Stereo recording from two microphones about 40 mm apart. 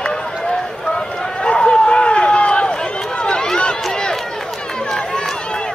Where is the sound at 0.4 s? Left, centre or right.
Centre.